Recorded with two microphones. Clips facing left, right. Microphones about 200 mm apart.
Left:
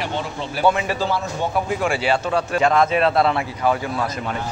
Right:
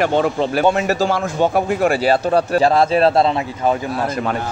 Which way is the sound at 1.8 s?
40° right (ahead or behind).